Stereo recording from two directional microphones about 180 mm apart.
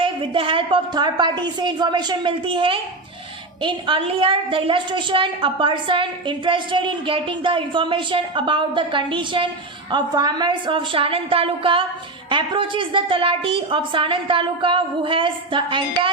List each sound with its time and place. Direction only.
0.0 s a woman's voice: 30° right (ahead or behind)